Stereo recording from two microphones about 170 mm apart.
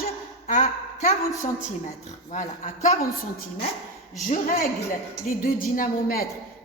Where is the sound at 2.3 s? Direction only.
40° left (ahead or behind).